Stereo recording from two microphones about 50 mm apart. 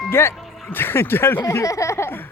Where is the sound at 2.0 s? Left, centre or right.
Left.